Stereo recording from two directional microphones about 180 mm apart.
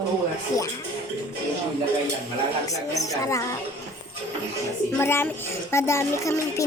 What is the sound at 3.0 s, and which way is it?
Music, 15° left (ahead or behind).